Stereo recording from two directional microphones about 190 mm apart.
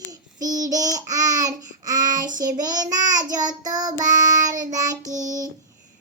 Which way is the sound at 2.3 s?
20° right (ahead or behind).